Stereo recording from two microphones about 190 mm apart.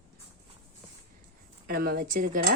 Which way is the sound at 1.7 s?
55° right (ahead or behind).